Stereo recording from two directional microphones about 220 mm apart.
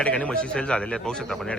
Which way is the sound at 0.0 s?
5° left (ahead or behind).